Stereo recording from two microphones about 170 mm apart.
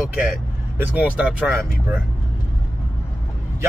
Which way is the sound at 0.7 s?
10° right (ahead or behind).